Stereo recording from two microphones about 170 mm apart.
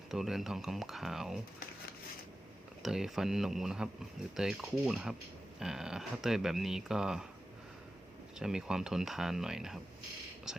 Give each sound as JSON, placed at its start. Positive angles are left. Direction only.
{"t": 0.1, "sound": "speech", "side_deg": 0}
{"t": 2.8, "sound": "speech", "side_deg": -5}
{"t": 8.4, "sound": "speech", "side_deg": -5}